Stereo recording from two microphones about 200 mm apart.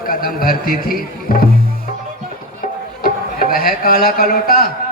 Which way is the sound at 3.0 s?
45° left (ahead or behind).